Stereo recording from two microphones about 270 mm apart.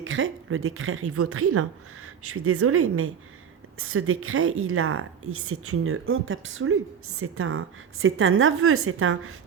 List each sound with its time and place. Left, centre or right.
0.0 s speech: right